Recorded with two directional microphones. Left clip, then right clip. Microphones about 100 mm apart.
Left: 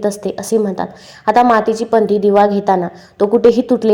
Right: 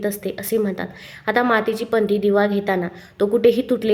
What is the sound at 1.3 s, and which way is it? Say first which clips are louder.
Speech: left 8 dB; 20° right (ahead or behind).